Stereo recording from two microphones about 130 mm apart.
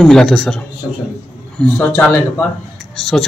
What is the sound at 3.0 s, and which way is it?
Speech, centre (ahead or behind).